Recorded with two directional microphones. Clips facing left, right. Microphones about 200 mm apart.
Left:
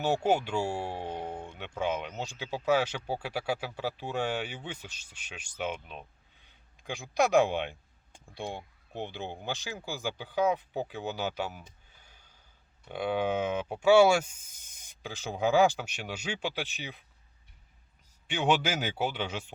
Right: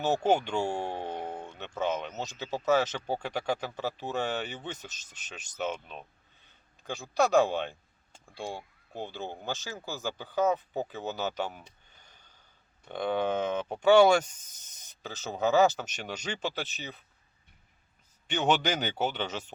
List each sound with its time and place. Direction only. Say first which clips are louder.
0.0 s speech: right 1 dB; 10° left (ahead or behind)
9.0 s speech: even; 15° left (ahead or behind)
18.3 s speech: right 1 dB; 10° left (ahead or behind)